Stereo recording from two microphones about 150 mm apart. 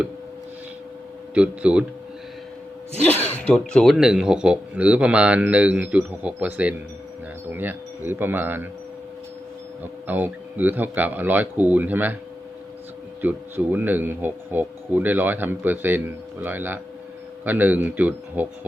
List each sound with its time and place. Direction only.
1.3 s speech: 10° right (ahead or behind)
3.1 s speech: 10° left (ahead or behind); by 8.6 s 15° right (ahead or behind)
9.8 s speech: 10° right (ahead or behind)
13.2 s speech: 10° right (ahead or behind)